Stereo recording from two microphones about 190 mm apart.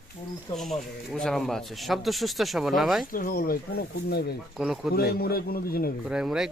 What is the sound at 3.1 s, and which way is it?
Speech, 45° left (ahead or behind).